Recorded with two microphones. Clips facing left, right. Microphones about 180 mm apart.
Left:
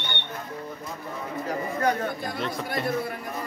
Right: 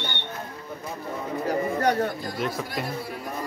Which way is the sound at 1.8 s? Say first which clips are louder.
Right 1 dB; 35° right (ahead or behind).